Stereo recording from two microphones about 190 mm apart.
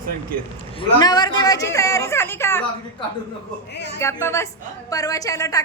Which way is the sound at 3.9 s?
15° left (ahead or behind).